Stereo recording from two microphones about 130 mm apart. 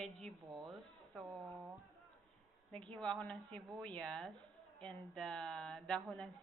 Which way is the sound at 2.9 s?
5° left (ahead or behind).